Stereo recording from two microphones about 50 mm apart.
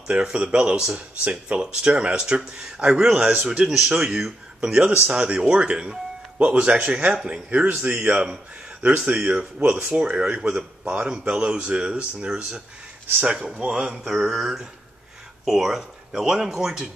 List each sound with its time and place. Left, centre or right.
0.1 s speech: right
3.4 s speech: centre
4.8 s speech: right
9.9 s speech: centre
14.0 s a sound: centre
15.4 s speech: centre